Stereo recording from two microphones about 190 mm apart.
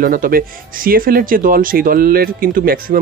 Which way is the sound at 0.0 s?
50° right (ahead or behind).